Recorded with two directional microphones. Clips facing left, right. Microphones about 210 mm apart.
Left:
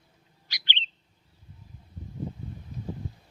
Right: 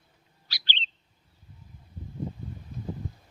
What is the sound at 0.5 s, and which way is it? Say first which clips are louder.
Bird: even; 20° left (ahead or behind).